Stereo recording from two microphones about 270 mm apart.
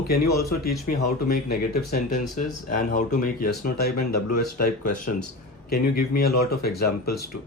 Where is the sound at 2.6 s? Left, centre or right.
Left.